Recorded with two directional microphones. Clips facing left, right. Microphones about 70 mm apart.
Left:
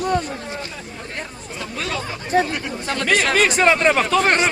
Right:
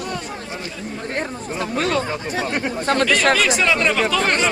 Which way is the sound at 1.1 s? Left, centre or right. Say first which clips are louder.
Right 7 dB; right.